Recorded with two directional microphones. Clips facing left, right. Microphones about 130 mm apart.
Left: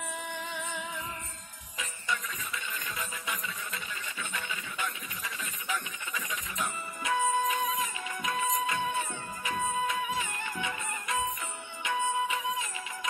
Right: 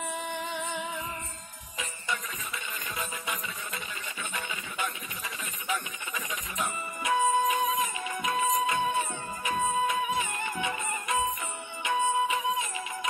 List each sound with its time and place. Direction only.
0.1 s music: 20° right (ahead or behind)
4.5 s a sound: 20° right (ahead or behind)
11.8 s music: 20° right (ahead or behind)